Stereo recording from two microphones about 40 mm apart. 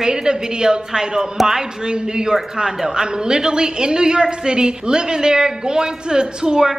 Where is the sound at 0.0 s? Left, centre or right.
Centre.